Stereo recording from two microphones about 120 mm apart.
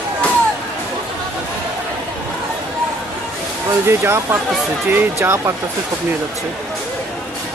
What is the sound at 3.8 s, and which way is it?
Speech, 20° right (ahead or behind).